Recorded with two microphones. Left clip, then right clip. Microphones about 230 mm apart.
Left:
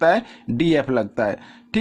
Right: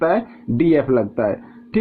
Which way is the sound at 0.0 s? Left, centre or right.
Left.